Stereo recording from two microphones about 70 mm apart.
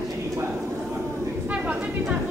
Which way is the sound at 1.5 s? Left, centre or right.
Centre.